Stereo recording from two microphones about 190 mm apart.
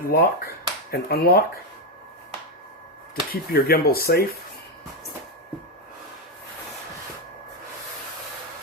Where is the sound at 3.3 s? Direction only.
55° left (ahead or behind).